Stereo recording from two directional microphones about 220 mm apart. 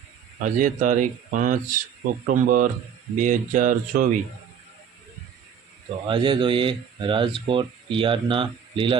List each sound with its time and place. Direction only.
0.4 s speech: 35° right (ahead or behind)
6.1 s speech: 20° right (ahead or behind)